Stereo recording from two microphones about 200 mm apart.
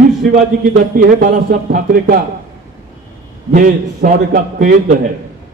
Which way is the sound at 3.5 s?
45° right (ahead or behind).